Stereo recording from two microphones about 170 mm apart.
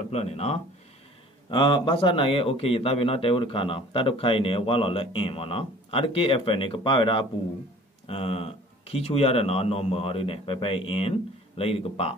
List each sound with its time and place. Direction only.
0.1 s a man's voice: 40° left (ahead or behind)